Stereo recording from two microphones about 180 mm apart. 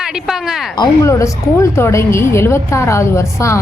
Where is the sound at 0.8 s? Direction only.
15° left (ahead or behind).